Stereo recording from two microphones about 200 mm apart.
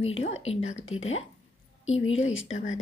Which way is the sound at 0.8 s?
90° left.